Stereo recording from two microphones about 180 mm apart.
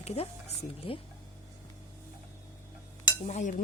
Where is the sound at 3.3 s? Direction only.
40° left (ahead or behind).